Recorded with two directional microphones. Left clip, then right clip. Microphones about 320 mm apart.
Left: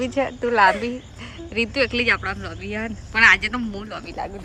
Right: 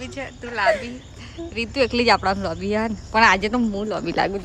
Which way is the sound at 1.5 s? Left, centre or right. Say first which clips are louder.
Even; centre.